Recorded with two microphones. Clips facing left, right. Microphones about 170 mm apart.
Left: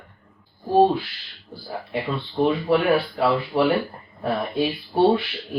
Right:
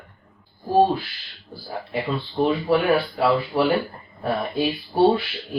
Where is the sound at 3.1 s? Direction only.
Centre (ahead or behind).